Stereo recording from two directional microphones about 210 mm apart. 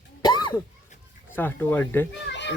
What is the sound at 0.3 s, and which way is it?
Cough, 20° left (ahead or behind).